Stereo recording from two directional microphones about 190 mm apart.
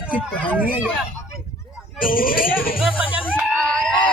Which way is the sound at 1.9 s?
50° left (ahead or behind).